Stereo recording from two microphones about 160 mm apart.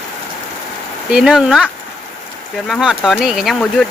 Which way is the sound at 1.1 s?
5° right (ahead or behind).